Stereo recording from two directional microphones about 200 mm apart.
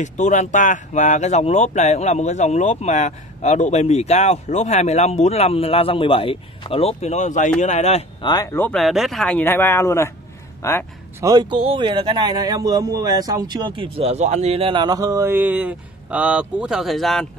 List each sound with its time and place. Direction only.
0.0 s speech: 35° left (ahead or behind)
8.3 s a man's voice: 15° left (ahead or behind)
11.1 s a man's voice: 20° right (ahead or behind); by 17.3 s centre (ahead or behind)